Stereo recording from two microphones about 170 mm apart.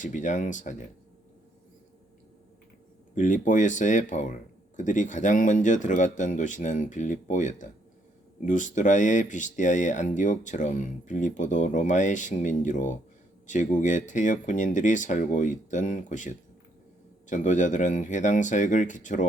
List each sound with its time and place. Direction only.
0.0 s speech: 45° left (ahead or behind)
3.2 s speech: 50° left (ahead or behind)